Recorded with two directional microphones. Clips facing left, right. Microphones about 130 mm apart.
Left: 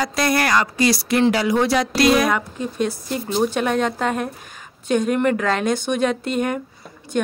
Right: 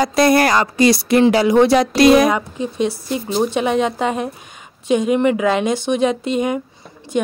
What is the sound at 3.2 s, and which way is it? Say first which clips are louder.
A woman's voice: right 2 dB; 10° right (ahead or behind).